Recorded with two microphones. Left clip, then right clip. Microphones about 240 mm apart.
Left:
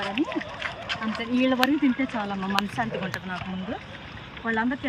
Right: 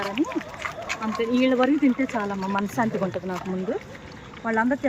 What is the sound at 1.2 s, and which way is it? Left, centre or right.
Speech, centre.